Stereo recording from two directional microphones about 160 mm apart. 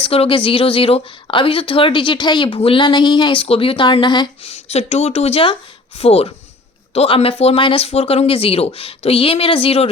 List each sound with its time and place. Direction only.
0.0 s speech: 35° left (ahead or behind)
4.5 s speech: 40° left (ahead or behind)